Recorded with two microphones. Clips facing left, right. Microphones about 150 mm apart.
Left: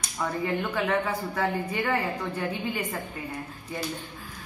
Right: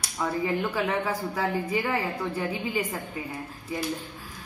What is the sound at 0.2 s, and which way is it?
A woman's voice, 10° right (ahead or behind).